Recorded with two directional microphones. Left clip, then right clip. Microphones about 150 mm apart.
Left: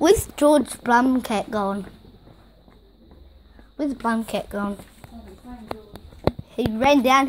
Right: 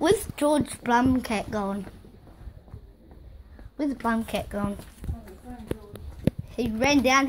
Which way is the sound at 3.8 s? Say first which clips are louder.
Left 3 dB; 15° left (ahead or behind).